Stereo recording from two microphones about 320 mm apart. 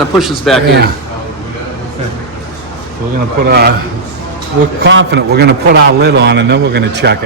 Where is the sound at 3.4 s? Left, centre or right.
Right.